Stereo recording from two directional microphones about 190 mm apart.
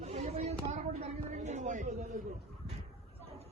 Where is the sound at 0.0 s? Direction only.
35° right (ahead or behind).